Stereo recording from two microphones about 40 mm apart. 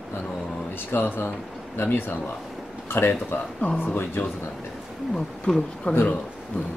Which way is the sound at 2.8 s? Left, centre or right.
Left.